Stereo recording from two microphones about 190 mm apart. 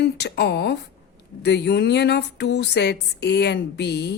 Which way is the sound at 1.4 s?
60° left (ahead or behind).